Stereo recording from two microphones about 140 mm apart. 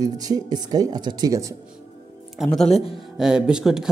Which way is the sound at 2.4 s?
5° left (ahead or behind).